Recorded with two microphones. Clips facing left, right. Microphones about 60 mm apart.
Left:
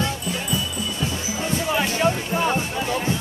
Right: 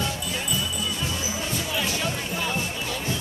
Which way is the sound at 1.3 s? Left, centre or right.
Left.